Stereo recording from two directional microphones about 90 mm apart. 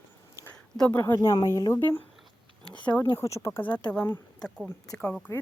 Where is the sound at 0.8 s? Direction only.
20° left (ahead or behind).